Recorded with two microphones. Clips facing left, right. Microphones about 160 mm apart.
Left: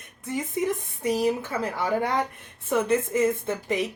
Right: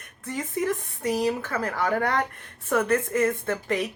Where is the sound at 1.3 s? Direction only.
15° left (ahead or behind).